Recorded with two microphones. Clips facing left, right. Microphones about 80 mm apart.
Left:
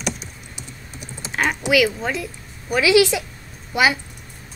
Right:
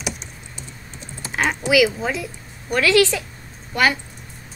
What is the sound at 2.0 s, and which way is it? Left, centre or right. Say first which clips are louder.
Speech: even; centre.